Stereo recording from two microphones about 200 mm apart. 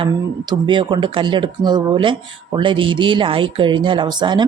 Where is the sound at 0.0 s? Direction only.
25° right (ahead or behind).